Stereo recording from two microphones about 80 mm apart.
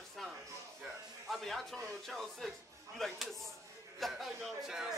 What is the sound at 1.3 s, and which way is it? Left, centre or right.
A man's voice, centre.